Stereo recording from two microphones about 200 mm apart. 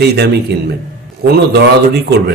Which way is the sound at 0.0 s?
55° right (ahead or behind).